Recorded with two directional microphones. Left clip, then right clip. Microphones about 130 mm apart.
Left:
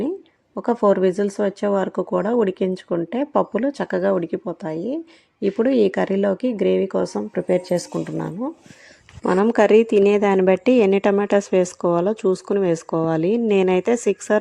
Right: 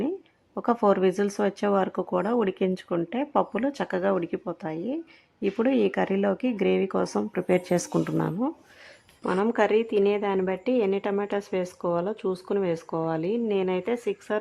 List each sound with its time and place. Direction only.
0.5 s speech: 20° left (ahead or behind); by 8.4 s 5° left (ahead or behind)
9.2 s speech: 45° left (ahead or behind)